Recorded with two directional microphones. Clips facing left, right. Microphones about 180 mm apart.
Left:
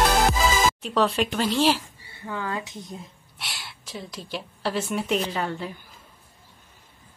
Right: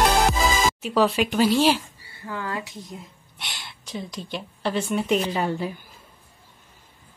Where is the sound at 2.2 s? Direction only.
20° left (ahead or behind).